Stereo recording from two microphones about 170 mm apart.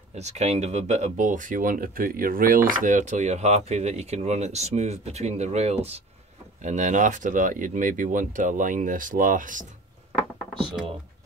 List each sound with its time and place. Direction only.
0.1 s speech: 40° right (ahead or behind)